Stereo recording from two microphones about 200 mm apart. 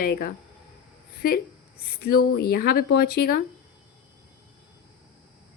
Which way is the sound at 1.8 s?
50° left (ahead or behind).